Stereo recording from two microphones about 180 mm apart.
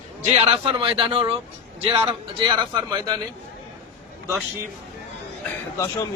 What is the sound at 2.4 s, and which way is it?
Speech, 25° right (ahead or behind).